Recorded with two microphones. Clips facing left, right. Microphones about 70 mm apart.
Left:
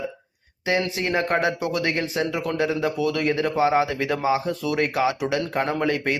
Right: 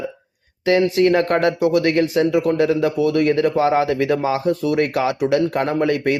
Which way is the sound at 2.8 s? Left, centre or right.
Right.